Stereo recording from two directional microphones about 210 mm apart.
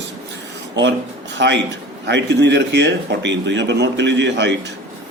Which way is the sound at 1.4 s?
55° right (ahead or behind).